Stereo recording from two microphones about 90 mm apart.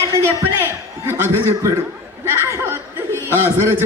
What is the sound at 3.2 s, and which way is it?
Chuckle, 30° left (ahead or behind).